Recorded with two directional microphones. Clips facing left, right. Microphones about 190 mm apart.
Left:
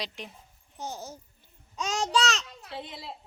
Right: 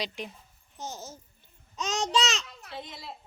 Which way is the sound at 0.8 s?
15° left (ahead or behind).